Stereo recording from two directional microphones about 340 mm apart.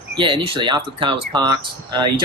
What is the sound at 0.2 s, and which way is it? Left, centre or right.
Speech, centre.